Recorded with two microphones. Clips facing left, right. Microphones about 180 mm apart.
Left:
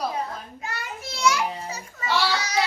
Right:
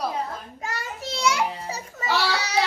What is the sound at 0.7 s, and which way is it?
Child singing, 35° right (ahead or behind).